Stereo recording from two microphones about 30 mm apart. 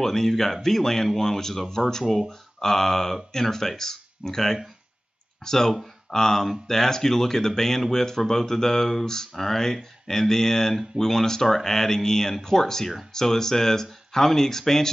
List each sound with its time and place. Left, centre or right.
0.0 s speech: centre
2.0 s speech: centre
2.6 s speech: centre